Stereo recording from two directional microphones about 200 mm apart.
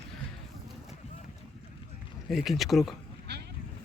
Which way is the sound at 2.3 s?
Centre (ahead or behind).